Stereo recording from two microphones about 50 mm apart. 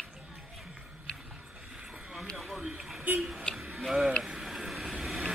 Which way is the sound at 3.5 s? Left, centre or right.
Centre.